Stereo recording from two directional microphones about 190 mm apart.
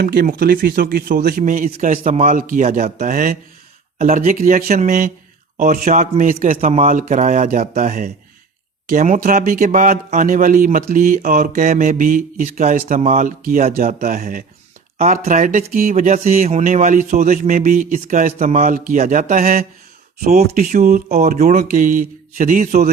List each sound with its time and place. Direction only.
0.0 s a man's voice: 50° right (ahead or behind)